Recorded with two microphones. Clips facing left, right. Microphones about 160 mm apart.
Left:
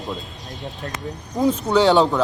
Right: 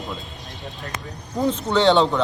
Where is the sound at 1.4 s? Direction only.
10° left (ahead or behind).